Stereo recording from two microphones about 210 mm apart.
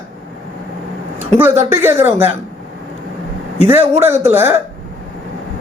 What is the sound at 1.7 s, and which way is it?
Speech, 10° right (ahead or behind).